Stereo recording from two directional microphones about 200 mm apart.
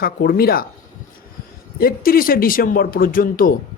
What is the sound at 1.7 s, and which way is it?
Speech, 50° left (ahead or behind).